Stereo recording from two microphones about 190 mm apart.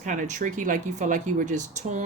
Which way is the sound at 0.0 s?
40° right (ahead or behind).